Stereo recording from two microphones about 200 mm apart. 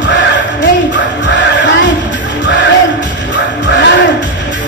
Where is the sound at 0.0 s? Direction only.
65° left (ahead or behind).